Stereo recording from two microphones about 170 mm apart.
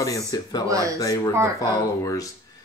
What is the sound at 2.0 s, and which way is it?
Speech, 20° left (ahead or behind).